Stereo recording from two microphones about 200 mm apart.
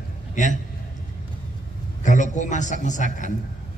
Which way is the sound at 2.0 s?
40° left (ahead or behind).